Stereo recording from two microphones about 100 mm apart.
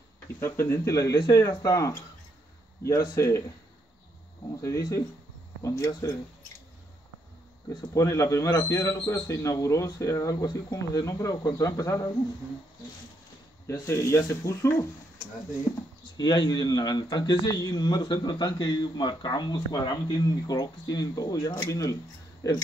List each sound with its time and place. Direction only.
0.4 s speech: 25° left (ahead or behind)
4.6 s speech: 30° left (ahead or behind)
7.9 s speech: 30° left (ahead or behind)
13.7 s speech: 30° left (ahead or behind)
16.2 s a man's voice: 45° left (ahead or behind)